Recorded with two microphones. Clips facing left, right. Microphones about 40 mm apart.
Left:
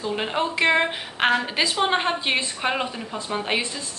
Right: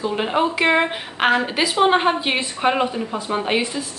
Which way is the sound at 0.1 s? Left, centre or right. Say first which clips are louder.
Right 3 dB; centre.